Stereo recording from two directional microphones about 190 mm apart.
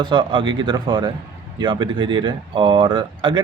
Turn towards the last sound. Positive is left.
turn(degrees=-25)  # may be behind; listen again after turning